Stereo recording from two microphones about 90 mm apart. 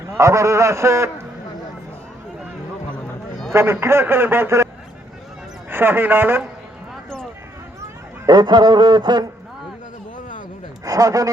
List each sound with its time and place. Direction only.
0.2 s a man's voice: 35° right (ahead or behind)
3.5 s a man's voice: 30° right (ahead or behind)
5.7 s a man's voice: 25° right (ahead or behind)
6.9 s a sound: 5° left (ahead or behind)
8.3 s a sound: 55° right (ahead or behind)
10.8 s a man's voice: 40° right (ahead or behind)